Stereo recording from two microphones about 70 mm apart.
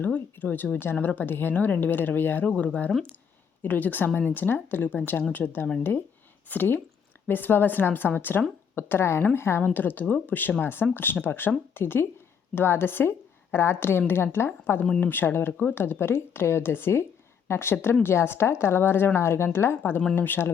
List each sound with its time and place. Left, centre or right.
0.0 s speech: left
9.6 s a woman's voice: left